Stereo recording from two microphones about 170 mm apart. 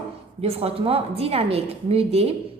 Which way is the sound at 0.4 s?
35° right (ahead or behind).